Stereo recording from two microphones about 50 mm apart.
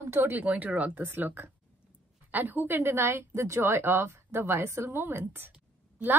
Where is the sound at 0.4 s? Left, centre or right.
Right.